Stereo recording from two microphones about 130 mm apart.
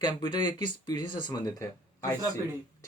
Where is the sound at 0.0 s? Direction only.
35° left (ahead or behind).